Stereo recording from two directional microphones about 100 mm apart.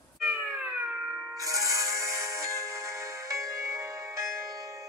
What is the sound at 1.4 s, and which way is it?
Music, 35° right (ahead or behind).